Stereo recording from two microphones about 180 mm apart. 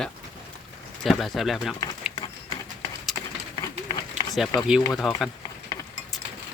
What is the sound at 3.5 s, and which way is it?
Run, 25° left (ahead or behind).